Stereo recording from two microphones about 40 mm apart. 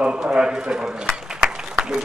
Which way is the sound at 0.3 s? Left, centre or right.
Centre.